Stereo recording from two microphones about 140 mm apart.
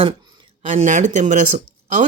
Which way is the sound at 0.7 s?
60° right (ahead or behind).